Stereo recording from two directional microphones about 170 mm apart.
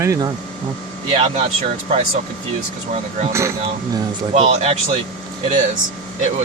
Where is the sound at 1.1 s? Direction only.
35° right (ahead or behind).